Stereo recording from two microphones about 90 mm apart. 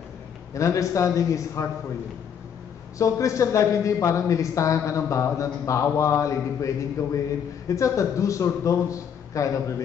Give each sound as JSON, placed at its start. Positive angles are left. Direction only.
{"t": 0.6, "sound": "speech", "side_deg": 35}
{"t": 3.0, "sound": "speech", "side_deg": 35}